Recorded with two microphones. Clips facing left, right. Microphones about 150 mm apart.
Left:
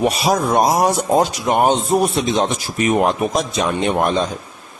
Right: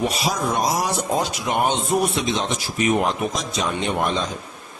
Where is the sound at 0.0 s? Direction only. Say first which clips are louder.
Left 6 dB; 60° left (ahead or behind); by 2.5 s 40° left (ahead or behind).